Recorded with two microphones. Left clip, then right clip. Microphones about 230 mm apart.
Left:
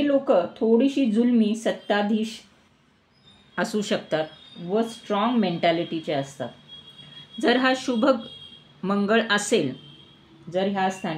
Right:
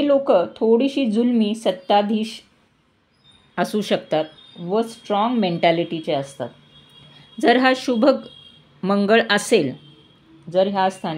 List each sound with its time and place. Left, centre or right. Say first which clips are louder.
0.0 s speech: right 4 dB; right
3.5 s a woman's voice: right 4 dB; right